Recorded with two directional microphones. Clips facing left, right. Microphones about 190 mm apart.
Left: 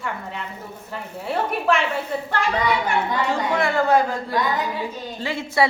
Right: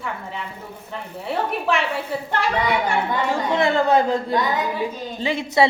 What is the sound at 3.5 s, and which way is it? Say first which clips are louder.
Speech: right 1 dB; 20° right (ahead or behind).